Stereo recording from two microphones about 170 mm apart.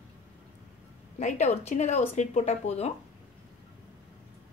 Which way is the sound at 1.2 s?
40° left (ahead or behind).